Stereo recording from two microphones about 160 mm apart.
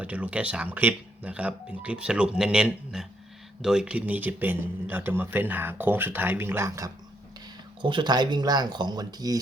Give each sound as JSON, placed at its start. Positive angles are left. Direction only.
{"t": 0.0, "sound": "speech", "side_deg": -10}